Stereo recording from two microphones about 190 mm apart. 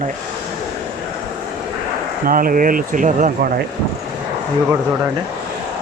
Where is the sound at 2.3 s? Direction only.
50° right (ahead or behind).